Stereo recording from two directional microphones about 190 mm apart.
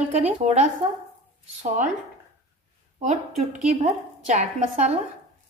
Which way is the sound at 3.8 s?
35° right (ahead or behind).